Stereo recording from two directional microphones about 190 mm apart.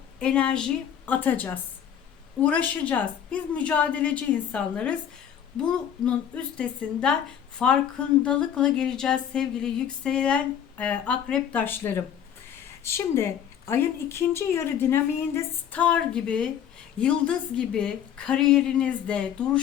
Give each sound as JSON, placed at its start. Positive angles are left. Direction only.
{"t": 0.2, "sound": "a woman's voice", "side_deg": 5}
{"t": 6.1, "sound": "a woman's voice", "side_deg": 5}